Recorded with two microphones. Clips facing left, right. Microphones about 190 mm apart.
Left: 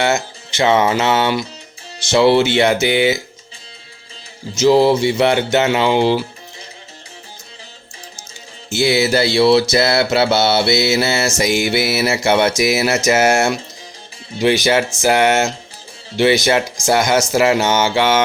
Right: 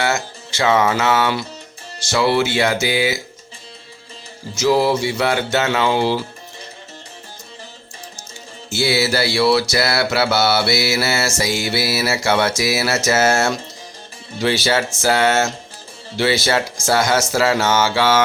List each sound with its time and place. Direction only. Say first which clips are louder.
0.0 s music: left 3 dB; 20° left (ahead or behind)
2.0 s mantra: left 5 dB; 25° left (ahead or behind)
4.5 s mantra: left 4 dB; 25° left (ahead or behind)
8.7 s mantra: left 3 dB; 20° left (ahead or behind)
14.3 s speech: left 4 dB; 15° left (ahead or behind)